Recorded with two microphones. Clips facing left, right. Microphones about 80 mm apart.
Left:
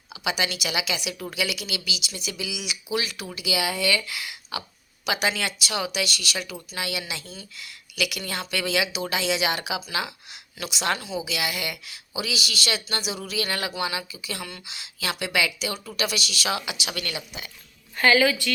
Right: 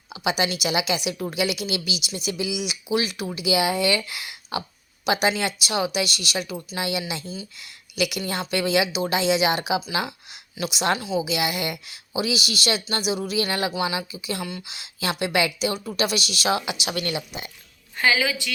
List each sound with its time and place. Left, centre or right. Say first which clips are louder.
0.1 s speech: right 3 dB; right
17.9 s a woman's voice: left 3 dB; centre